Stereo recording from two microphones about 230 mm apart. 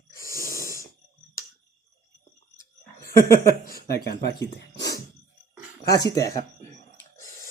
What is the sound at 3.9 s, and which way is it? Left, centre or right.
Speech, left.